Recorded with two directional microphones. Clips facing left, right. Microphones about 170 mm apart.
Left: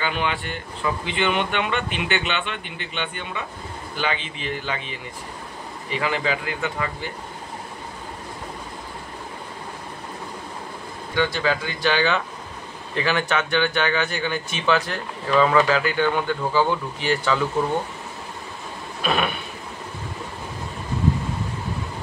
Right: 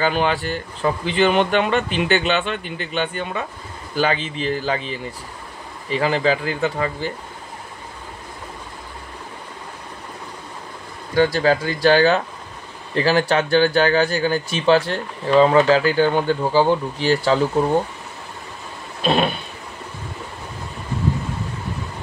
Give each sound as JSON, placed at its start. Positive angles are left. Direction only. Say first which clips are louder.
{"t": 0.0, "sound": "speech", "louder": "right 6 dB", "side_deg": -35}
{"t": 11.1, "sound": "speech", "louder": "right 6 dB", "side_deg": -40}
{"t": 19.0, "sound": "a sound", "louder": "right 5 dB", "side_deg": -30}